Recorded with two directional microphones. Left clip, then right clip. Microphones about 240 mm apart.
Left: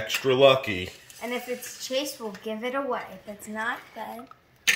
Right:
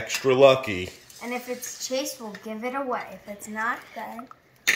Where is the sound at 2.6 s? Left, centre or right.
Centre.